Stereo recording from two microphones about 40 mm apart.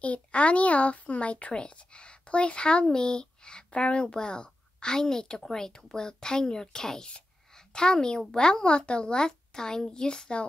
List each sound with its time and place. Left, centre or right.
0.0 s speech: left